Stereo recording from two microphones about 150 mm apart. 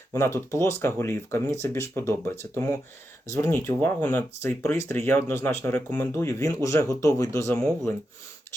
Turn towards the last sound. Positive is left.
turn(degrees=15)  # may be behind; listen again after turning